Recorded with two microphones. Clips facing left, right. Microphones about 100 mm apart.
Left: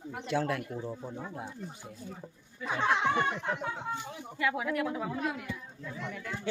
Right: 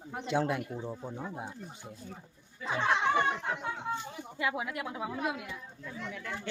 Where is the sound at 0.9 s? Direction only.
10° right (ahead or behind).